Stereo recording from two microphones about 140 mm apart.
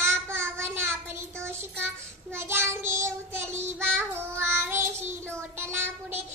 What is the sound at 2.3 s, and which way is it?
Child singing, 15° right (ahead or behind).